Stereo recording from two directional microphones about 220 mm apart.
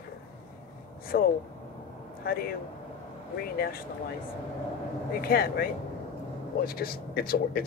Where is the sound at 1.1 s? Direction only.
45° left (ahead or behind).